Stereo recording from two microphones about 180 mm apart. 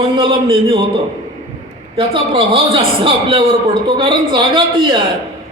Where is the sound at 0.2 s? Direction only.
25° right (ahead or behind).